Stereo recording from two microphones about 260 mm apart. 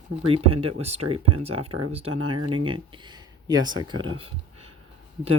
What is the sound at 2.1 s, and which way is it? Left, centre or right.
Speech, right.